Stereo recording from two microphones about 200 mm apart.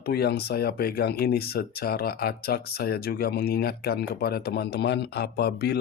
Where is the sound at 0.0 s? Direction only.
55° left (ahead or behind).